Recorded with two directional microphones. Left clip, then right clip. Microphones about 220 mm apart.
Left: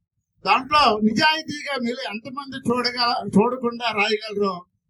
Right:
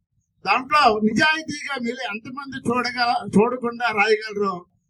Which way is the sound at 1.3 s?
30° left (ahead or behind).